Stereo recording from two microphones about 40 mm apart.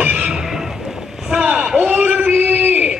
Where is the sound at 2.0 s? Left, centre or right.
Right.